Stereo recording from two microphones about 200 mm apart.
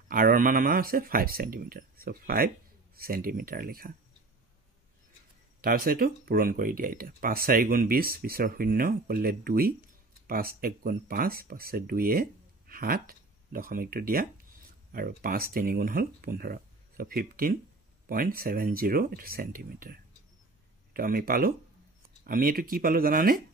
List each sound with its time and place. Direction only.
0.1 s speech: 45° right (ahead or behind)
5.6 s speech: 50° right (ahead or behind)